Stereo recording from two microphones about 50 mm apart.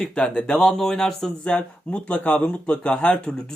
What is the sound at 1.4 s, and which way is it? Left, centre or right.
Speech, left.